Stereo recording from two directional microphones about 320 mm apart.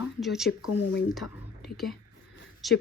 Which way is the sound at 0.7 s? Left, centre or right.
Left.